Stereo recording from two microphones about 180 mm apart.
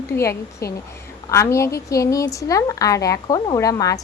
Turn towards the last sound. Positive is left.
turn(degrees=20)  # may be behind; listen again after turning